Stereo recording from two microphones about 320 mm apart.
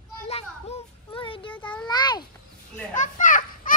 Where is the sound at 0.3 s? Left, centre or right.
Centre.